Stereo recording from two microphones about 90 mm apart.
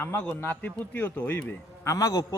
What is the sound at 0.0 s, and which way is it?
A man's voice, 20° left (ahead or behind).